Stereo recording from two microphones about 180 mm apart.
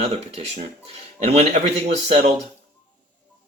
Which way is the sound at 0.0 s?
35° right (ahead or behind).